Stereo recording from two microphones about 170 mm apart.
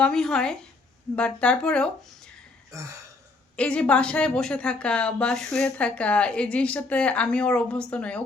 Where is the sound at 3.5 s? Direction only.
5° left (ahead or behind).